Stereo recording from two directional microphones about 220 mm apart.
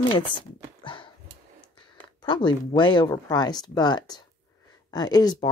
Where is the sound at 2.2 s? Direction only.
20° left (ahead or behind).